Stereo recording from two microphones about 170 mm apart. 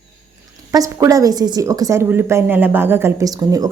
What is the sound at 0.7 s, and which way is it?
A woman's voice, 20° right (ahead or behind).